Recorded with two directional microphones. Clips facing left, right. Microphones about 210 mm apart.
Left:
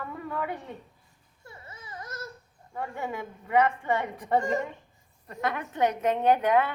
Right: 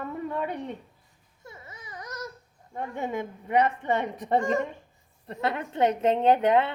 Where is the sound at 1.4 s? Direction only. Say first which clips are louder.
Right 1 dB; 15° right (ahead or behind).